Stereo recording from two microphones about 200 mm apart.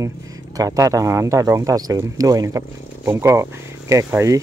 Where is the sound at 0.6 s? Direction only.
15° right (ahead or behind).